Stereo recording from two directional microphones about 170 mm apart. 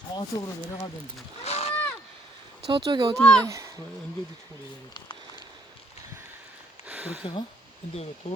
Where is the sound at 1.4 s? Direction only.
40° left (ahead or behind).